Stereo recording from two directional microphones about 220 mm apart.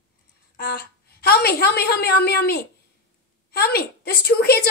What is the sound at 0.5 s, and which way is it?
A woman's voice, 45° left (ahead or behind).